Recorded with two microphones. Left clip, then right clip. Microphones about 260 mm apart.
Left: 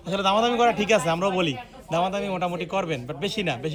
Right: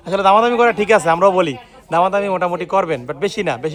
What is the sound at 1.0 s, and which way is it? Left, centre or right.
Speech, right.